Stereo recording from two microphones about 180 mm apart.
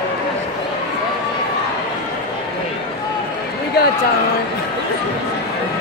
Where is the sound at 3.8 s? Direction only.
60° left (ahead or behind).